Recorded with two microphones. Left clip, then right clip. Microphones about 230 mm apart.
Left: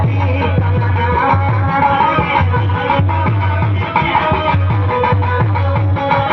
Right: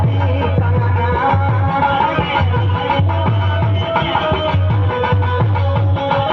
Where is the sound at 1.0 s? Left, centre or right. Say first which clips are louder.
Left 2 dB; left.